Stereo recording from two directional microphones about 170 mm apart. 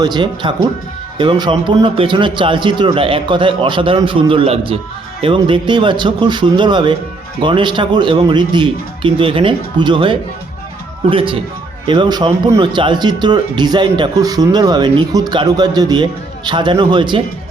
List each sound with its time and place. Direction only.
0.0 s a man's voice: 25° right (ahead or behind)